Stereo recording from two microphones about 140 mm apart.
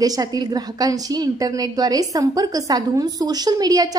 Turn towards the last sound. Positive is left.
turn(degrees=-25)  # may be behind; listen again after turning